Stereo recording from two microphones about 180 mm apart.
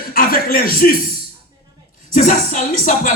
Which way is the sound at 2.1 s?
45° left (ahead or behind).